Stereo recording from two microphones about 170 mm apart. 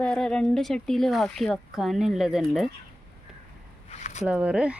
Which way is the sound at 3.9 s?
40° left (ahead or behind).